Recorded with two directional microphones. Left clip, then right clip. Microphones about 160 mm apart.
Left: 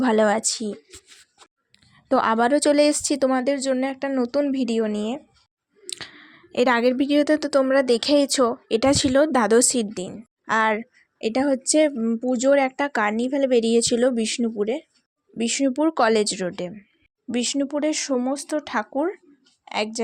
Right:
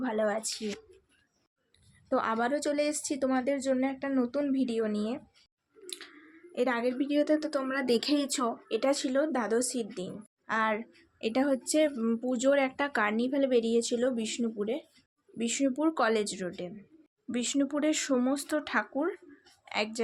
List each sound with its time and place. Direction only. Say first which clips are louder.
0.0 s speech: left 11 dB; 70° left (ahead or behind)
2.0 s a woman's voice: left 10 dB; 55° left (ahead or behind)
17.3 s a woman's voice: left 6 dB; 40° left (ahead or behind)